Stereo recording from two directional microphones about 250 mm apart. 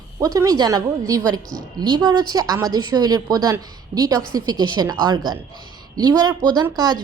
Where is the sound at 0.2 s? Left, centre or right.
Centre.